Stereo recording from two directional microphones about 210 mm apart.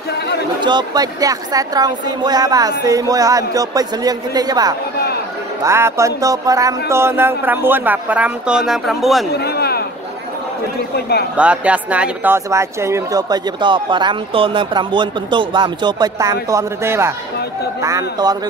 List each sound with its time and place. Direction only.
0.6 s speech: 20° right (ahead or behind); by 9.2 s centre (ahead or behind)
9.3 s a sound: 50° left (ahead or behind)
11.3 s speech: 5° right (ahead or behind)